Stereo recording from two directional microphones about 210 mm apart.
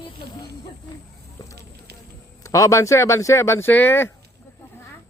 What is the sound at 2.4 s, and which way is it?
Speech, 15° left (ahead or behind).